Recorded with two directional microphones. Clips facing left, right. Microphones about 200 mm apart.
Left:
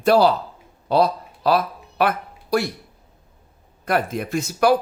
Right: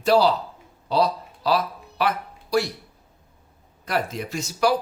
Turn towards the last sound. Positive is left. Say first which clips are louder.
# left 4 dB
turn(degrees=55)  # may be behind; listen again after turning